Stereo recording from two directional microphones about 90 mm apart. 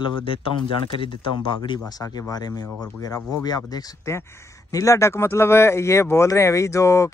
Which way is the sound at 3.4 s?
45° left (ahead or behind).